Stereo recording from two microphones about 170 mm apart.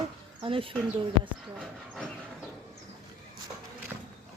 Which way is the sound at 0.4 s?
30° right (ahead or behind).